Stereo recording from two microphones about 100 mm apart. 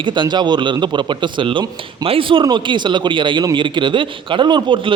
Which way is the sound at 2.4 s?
50° right (ahead or behind).